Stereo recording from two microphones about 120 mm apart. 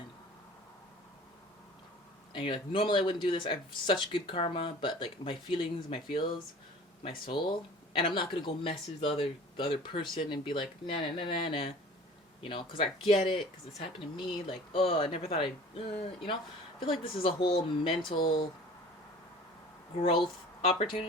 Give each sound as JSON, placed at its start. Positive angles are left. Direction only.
{"t": 2.3, "sound": "speech", "side_deg": 45}
{"t": 20.2, "sound": "speech", "side_deg": 45}